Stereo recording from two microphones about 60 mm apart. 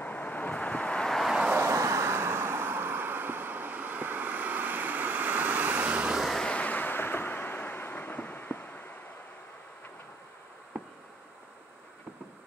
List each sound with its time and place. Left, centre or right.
0.0 s vehicle: left
1.6 s vehicle: right
6.5 s vehicle: left